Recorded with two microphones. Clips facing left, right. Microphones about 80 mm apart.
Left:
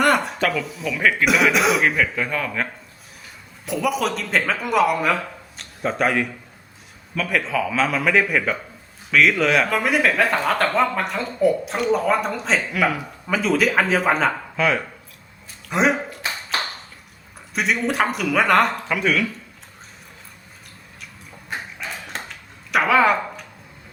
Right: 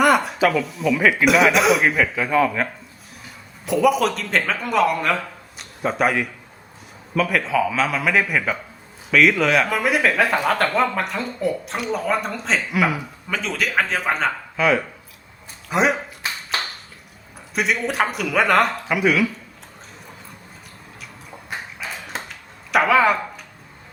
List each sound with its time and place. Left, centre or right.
0.0 s speech: centre
3.7 s speech: centre
17.5 s speech: centre
21.8 s a sound: centre